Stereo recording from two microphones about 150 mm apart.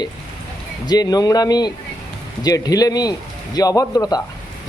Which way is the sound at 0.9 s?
25° left (ahead or behind).